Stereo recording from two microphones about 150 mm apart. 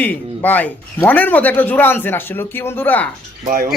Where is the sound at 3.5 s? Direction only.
70° right (ahead or behind).